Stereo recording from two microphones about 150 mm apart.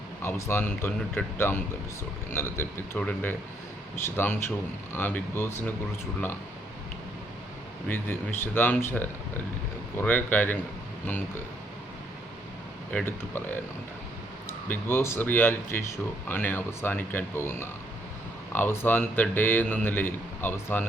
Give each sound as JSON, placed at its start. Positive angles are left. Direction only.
{"t": 0.2, "sound": "a man's voice", "side_deg": 15}
{"t": 7.9, "sound": "a man's voice", "side_deg": 15}
{"t": 12.9, "sound": "a man's voice", "side_deg": 10}
{"t": 14.7, "sound": "a man's voice", "side_deg": 15}